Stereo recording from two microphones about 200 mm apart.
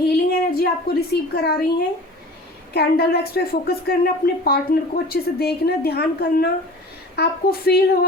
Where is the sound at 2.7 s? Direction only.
50° left (ahead or behind).